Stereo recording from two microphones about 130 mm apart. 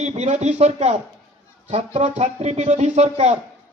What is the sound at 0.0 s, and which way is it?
Speech, 60° right (ahead or behind).